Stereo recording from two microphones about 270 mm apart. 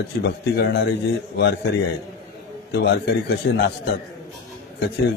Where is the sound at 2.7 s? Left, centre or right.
Left.